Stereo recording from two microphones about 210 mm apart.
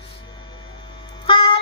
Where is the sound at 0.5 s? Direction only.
20° left (ahead or behind).